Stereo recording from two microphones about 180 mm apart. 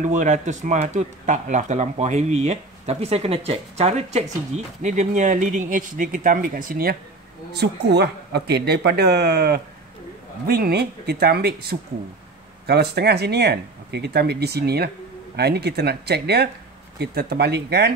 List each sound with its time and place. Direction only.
0.0 s speech: 45° right (ahead or behind)
7.5 s speech: 65° right (ahead or behind)
12.6 s speech: 60° right (ahead or behind)